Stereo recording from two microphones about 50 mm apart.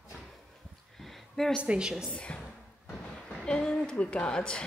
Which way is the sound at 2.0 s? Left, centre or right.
Left.